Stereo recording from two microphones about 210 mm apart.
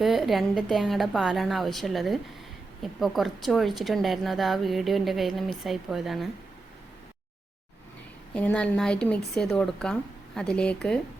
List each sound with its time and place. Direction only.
0.0 s a woman's voice: centre (ahead or behind)
8.3 s a woman's voice: 5° left (ahead or behind)